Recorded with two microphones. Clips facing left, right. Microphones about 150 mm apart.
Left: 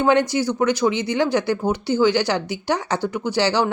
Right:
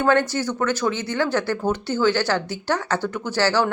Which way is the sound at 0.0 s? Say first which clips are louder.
Left 2 dB; 15° left (ahead or behind).